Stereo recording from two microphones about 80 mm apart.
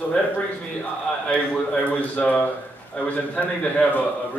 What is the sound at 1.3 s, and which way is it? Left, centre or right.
A man's voice, centre.